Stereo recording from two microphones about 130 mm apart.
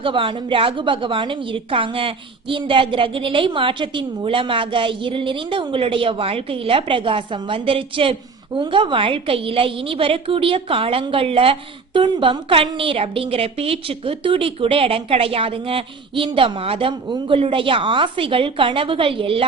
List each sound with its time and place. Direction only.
0.0 s a woman's voice: 40° right (ahead or behind)